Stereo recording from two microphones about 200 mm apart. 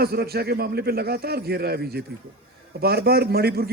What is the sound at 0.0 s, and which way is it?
A man's voice, 50° right (ahead or behind).